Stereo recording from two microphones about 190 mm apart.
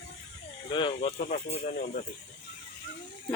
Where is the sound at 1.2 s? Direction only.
40° left (ahead or behind).